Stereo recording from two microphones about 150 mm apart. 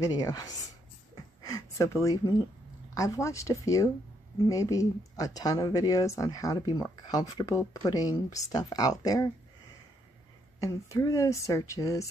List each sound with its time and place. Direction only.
0.0 s speech: 25° left (ahead or behind)
10.6 s speech: 20° left (ahead or behind)